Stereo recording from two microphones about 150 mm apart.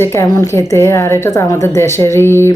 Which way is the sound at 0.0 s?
15° left (ahead or behind).